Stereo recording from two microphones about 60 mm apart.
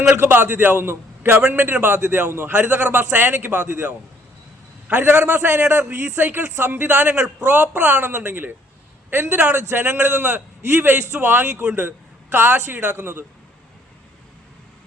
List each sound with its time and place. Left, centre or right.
0.2 s a man's voice: right
4.9 s a man's voice: right; by 7.5 s centre
7.7 s a man's voice: right